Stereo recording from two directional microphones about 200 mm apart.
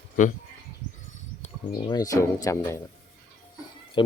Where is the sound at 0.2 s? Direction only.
40° left (ahead or behind).